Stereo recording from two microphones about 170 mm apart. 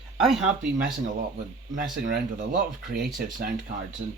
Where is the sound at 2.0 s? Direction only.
50° right (ahead or behind).